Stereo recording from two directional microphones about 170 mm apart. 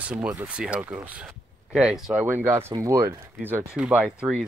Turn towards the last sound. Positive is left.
turn(degrees=-5)  # may be behind; listen again after turning